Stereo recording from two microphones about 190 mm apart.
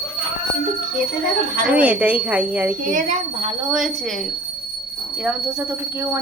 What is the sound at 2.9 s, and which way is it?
Speech, 40° right (ahead or behind).